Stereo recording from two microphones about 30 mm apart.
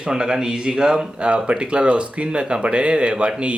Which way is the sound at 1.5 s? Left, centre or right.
Right.